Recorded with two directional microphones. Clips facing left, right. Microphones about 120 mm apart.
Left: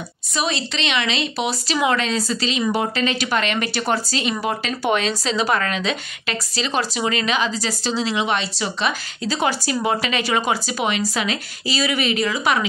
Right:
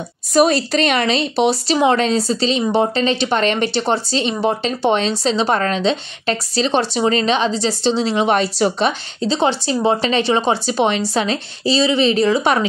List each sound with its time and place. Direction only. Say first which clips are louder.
0.3 s speech: right 10 dB; 45° right (ahead or behind)